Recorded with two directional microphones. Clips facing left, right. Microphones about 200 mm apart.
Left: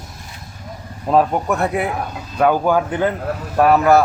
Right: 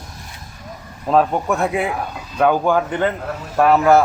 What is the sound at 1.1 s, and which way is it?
Speech, 5° left (ahead or behind).